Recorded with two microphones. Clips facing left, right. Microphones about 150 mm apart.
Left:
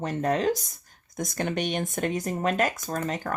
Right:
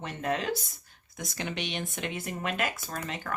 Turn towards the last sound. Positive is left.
turn(degrees=40)  # may be behind; listen again after turning